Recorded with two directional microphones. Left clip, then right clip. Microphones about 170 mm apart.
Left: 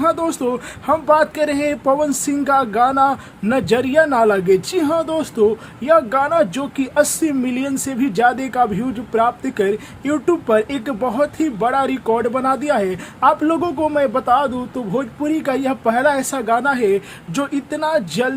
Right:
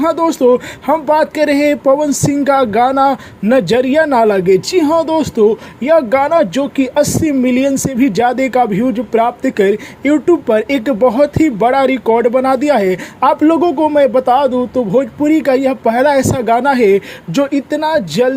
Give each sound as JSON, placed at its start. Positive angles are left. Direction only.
{"t": 0.0, "sound": "speech", "side_deg": -25}